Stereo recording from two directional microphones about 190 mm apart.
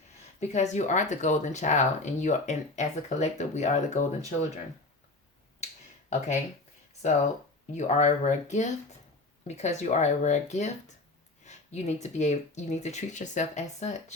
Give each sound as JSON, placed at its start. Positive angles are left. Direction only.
{"t": 0.3, "sound": "speech", "side_deg": 35}
{"t": 6.1, "sound": "speech", "side_deg": 40}
{"t": 7.7, "sound": "speech", "side_deg": 40}